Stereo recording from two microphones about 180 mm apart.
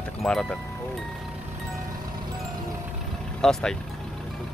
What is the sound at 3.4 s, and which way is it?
Speech, 5° left (ahead or behind).